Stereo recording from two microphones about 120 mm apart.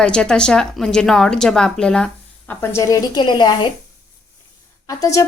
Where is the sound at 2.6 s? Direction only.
25° left (ahead or behind); by 3.5 s 40° left (ahead or behind).